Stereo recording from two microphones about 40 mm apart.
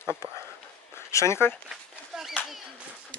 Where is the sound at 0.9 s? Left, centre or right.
Left.